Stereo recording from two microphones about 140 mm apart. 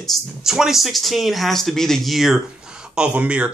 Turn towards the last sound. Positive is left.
turn(degrees=-10)  # may be behind; listen again after turning